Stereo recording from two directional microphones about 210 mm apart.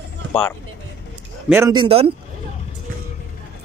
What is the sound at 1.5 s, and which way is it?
Speech, 10° right (ahead or behind).